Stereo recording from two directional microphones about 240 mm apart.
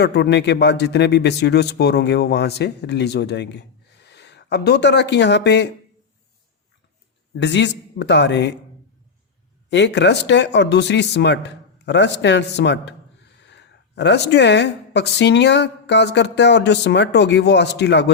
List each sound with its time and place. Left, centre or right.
0.0 s speech: left
7.4 s speech: left
9.6 s speech: left